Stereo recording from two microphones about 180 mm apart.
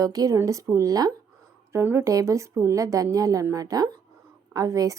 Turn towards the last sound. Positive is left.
turn(degrees=-20)  # may be behind; listen again after turning